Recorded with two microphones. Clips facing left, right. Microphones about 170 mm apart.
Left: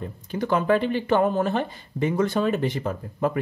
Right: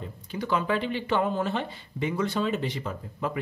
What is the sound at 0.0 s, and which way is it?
Speech, 50° left (ahead or behind).